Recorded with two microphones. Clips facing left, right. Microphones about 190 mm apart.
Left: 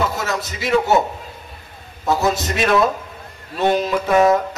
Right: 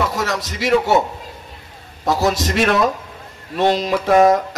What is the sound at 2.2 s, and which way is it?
A man's voice, 85° right.